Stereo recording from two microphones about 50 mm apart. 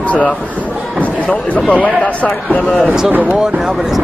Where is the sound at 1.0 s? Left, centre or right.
Left.